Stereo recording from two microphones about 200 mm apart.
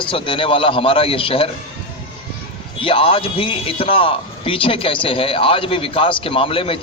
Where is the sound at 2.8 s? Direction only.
25° left (ahead or behind).